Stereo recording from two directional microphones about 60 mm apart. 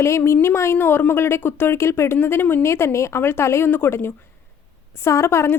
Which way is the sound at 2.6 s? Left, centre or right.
Left.